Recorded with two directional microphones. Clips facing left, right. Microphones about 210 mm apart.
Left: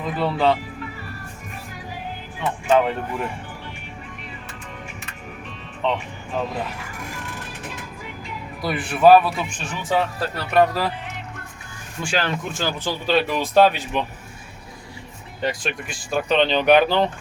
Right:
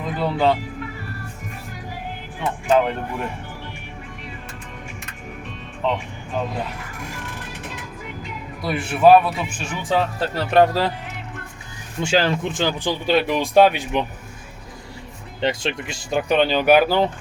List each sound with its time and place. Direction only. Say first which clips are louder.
0.0 s speech: even; centre (ahead or behind)
2.6 s speech: even; centre (ahead or behind)
5.8 s speech: even; centre (ahead or behind)
8.6 s speech: even; centre (ahead or behind)
9.9 s speech: right 1 dB; 25° right (ahead or behind)
11.9 s speech: right 5 dB; 25° right (ahead or behind)
15.4 s speech: right 3 dB; 25° right (ahead or behind)
16.3 s speech: even; 10° right (ahead or behind)